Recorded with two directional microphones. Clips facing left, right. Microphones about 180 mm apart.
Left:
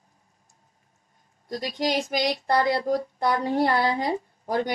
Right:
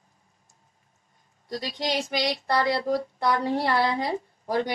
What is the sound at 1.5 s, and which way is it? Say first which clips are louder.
Speech: left 3 dB; 45° left (ahead or behind).